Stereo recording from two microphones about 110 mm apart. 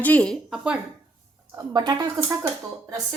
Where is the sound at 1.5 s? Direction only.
35° right (ahead or behind).